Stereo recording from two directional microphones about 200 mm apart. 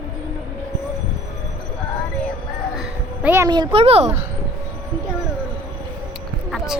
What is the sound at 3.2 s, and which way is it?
Speech, 10° right (ahead or behind).